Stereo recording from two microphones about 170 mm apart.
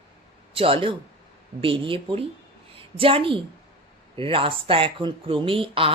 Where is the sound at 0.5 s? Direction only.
35° right (ahead or behind).